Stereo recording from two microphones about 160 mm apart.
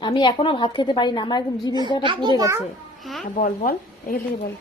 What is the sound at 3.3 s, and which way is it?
Speech, 55° left (ahead or behind).